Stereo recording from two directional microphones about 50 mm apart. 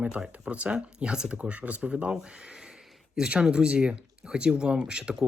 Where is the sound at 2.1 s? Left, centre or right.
Centre.